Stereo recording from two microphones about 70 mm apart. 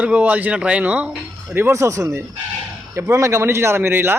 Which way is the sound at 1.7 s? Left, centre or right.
Right.